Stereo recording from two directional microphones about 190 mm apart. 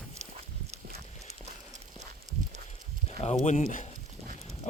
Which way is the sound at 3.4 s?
40° left (ahead or behind).